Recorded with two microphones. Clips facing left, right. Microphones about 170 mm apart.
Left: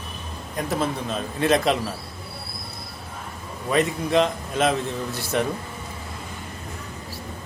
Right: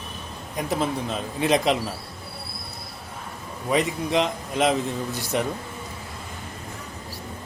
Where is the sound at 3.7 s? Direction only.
15° right (ahead or behind).